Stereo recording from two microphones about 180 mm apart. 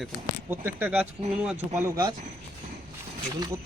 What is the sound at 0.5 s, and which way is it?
A man's voice, 10° right (ahead or behind).